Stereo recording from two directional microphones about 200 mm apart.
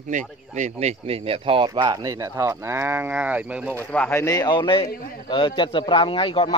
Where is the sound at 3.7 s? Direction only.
10° left (ahead or behind).